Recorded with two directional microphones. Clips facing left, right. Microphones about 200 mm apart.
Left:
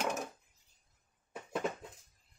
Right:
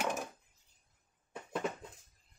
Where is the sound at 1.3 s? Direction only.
Centre (ahead or behind).